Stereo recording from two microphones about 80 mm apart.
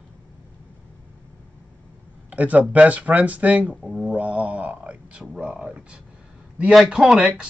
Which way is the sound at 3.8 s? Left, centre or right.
Centre.